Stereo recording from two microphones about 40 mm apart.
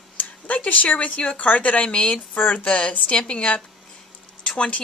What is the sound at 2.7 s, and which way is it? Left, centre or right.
A woman's voice, left.